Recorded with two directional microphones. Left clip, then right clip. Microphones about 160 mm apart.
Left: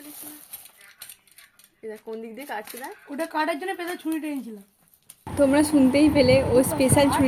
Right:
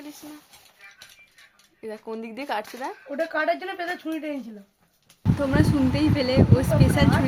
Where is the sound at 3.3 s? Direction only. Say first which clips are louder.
Even; centre (ahead or behind).